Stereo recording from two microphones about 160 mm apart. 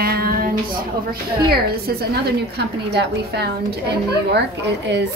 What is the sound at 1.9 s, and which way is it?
Speech, 75° right (ahead or behind).